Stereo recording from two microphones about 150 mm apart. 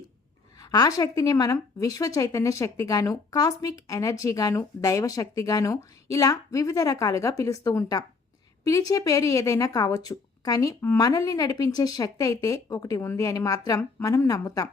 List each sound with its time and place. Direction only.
0.6 s a woman's voice: 25° left (ahead or behind)